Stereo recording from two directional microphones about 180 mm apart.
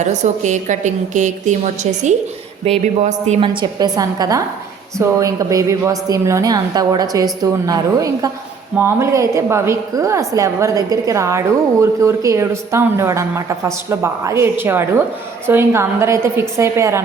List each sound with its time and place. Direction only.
0.0 s a woman's voice: 40° right (ahead or behind); by 17.0 s 15° right (ahead or behind)